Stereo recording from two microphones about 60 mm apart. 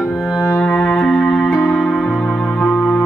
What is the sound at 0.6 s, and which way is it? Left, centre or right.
Music, centre.